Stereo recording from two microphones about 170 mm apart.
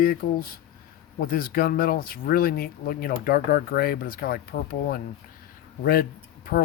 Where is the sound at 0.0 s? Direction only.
60° left (ahead or behind).